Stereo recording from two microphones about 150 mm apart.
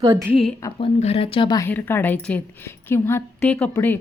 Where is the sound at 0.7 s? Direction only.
40° left (ahead or behind).